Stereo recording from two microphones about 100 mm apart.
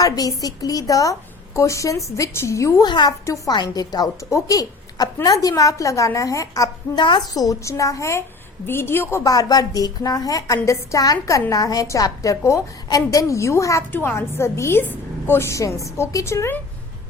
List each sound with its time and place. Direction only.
0.0 s a woman's voice: 35° left (ahead or behind)
2.8 s a woman's voice: 45° left (ahead or behind)
7.0 s a woman's voice: 50° left (ahead or behind); by 9.3 s 25° left (ahead or behind)
9.3 s a woman's voice: 40° left (ahead or behind)